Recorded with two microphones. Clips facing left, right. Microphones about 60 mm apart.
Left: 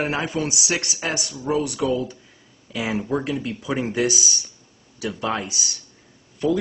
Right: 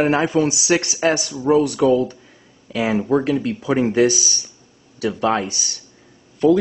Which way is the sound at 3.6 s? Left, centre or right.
Right.